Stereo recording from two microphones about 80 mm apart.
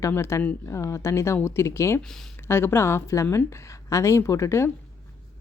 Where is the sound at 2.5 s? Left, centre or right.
Left.